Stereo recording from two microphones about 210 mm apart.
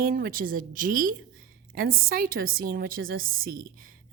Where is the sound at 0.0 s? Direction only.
45° right (ahead or behind).